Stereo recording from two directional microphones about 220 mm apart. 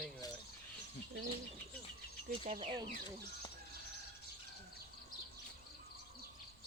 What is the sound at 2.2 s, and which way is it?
Speech, 30° right (ahead or behind).